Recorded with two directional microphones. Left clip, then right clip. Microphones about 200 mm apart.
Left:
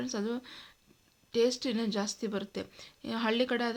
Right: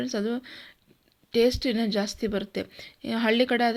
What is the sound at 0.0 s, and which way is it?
A woman's voice, 15° right (ahead or behind).